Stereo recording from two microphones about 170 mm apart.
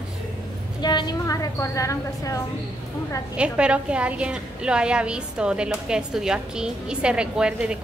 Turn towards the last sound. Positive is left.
turn(degrees=-5)  # may be behind; listen again after turning